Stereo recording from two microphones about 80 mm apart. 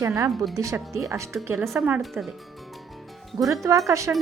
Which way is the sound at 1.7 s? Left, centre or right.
Right.